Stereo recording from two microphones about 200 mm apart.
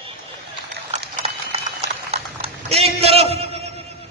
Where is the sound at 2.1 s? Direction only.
30° right (ahead or behind).